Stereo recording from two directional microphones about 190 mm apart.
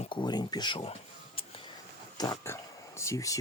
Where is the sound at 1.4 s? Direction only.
30° left (ahead or behind).